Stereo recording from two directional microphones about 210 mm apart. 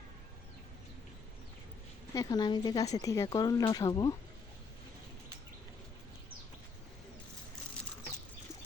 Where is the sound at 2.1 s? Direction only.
15° left (ahead or behind).